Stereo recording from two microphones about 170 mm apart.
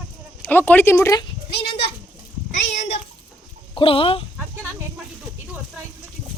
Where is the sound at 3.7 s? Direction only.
35° left (ahead or behind).